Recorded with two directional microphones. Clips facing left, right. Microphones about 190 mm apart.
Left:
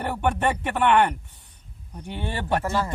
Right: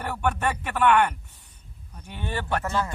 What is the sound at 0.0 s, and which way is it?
Speech, 25° left (ahead or behind).